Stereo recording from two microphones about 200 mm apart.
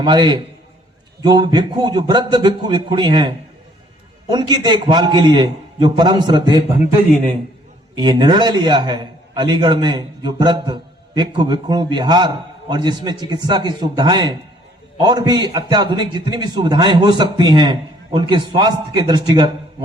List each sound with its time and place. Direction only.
0.0 s a man's voice: 20° right (ahead or behind)
7.9 s a man's voice: 20° right (ahead or behind)